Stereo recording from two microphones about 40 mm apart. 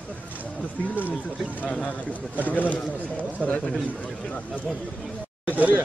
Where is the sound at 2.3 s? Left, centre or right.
Left.